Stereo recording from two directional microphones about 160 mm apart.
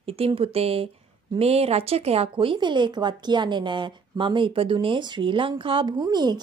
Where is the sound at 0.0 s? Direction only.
35° right (ahead or behind).